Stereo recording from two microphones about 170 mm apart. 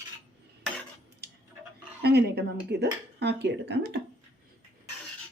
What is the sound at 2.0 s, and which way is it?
Speech, 75° right (ahead or behind).